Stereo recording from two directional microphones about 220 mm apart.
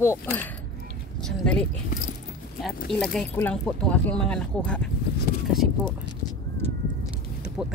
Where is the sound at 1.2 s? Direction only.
5° left (ahead or behind).